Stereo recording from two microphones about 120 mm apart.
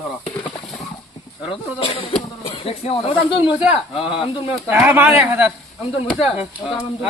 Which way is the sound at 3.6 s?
5° right (ahead or behind).